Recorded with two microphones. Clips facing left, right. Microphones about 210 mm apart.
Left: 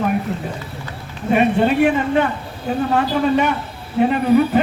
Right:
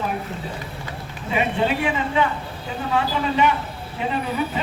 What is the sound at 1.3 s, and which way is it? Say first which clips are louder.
A man's voice: left 7 dB; 50° left (ahead or behind).